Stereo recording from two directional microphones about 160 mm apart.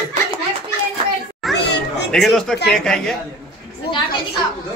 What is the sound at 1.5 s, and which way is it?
Cat, 90° left.